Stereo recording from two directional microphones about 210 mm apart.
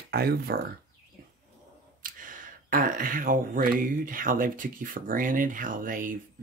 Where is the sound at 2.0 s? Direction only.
40° right (ahead or behind).